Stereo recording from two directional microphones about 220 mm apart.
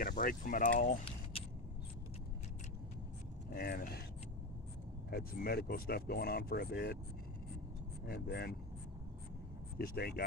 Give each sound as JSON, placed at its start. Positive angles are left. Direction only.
{"t": 0.0, "sound": "speech", "side_deg": 40}
{"t": 3.4, "sound": "speech", "side_deg": 45}
{"t": 5.1, "sound": "speech", "side_deg": 45}
{"t": 8.1, "sound": "speech", "side_deg": 45}
{"t": 9.8, "sound": "speech", "side_deg": 45}